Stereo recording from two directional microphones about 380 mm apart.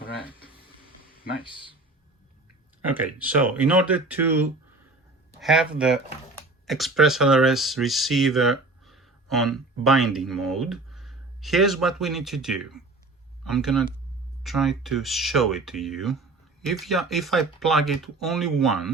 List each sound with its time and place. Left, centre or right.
0.0 s a sound: left
1.2 s speech: centre
2.8 s speech: centre